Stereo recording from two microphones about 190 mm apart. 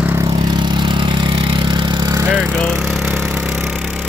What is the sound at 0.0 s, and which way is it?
Vehicle, 10° right (ahead or behind).